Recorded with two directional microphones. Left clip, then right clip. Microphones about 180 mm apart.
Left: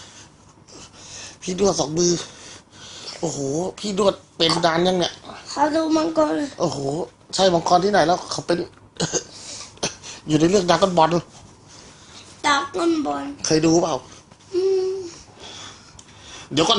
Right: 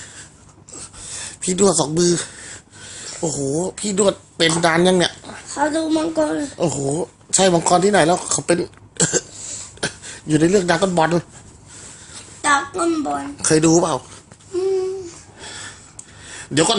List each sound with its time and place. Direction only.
1.1 s speech: 30° right (ahead or behind)
2.8 s speech: 15° right (ahead or behind)
5.5 s a woman's voice: 10° right (ahead or behind)
6.6 s speech: 20° right (ahead or behind)
9.0 s throat clearing: 25° right (ahead or behind)
9.3 s cough: centre (ahead or behind)
9.8 s speech: 15° right (ahead or behind)
12.4 s a sound: centre (ahead or behind)
13.4 s speech: 20° right (ahead or behind)
16.3 s a sound: 20° right (ahead or behind)